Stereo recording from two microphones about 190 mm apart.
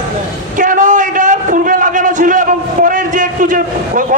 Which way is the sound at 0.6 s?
45° right (ahead or behind).